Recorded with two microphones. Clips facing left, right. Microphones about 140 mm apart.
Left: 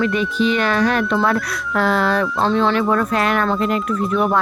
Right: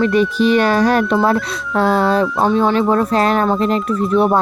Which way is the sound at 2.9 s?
30° right (ahead or behind).